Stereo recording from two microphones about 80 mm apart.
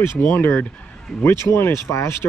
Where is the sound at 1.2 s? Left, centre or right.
Left.